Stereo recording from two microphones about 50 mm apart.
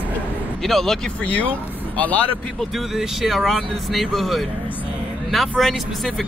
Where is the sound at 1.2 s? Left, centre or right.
Left.